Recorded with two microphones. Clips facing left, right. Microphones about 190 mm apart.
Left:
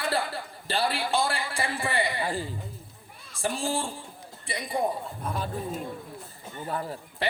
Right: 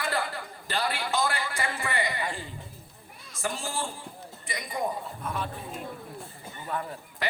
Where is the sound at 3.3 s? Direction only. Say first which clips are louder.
Left 4 dB; 30° left (ahead or behind).